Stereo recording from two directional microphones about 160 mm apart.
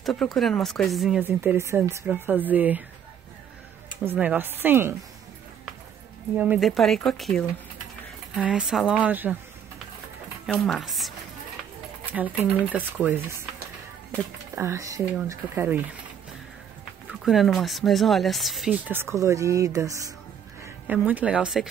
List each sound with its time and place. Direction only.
0.0 s speech: centre (ahead or behind)
1.2 s speech: 10° right (ahead or behind)
4.0 s speech: 10° right (ahead or behind)
6.3 s speech: 10° right (ahead or behind)
10.4 s speech: 5° left (ahead or behind); by 13.4 s 15° right (ahead or behind)
14.5 s speech: 20° right (ahead or behind)
17.1 s speech: centre (ahead or behind)
18.9 s speech: 15° right (ahead or behind)
20.6 s a woman's voice: 10° right (ahead or behind)